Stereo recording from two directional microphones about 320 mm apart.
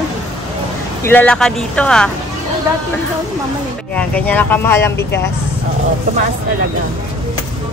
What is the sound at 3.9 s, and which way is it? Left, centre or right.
Speech, centre.